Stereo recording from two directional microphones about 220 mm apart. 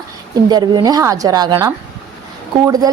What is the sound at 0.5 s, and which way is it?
A woman's voice, 20° right (ahead or behind).